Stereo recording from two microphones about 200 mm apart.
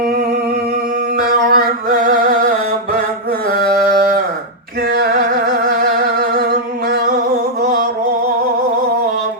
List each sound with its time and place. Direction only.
1.2 s music: 50° right (ahead or behind)